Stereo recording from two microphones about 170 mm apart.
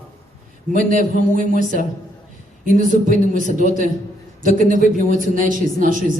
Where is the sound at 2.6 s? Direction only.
50° right (ahead or behind).